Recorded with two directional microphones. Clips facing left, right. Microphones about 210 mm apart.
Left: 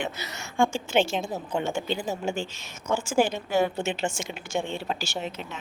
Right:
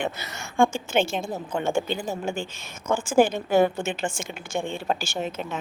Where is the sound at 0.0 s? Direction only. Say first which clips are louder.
Right 3 dB; 50° right (ahead or behind).